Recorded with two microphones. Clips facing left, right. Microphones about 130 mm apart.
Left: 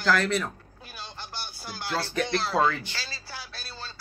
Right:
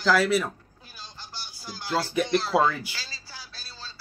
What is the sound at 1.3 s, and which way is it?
Music, 60° left (ahead or behind).